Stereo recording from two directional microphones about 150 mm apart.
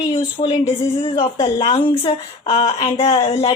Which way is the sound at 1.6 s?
40° left (ahead or behind).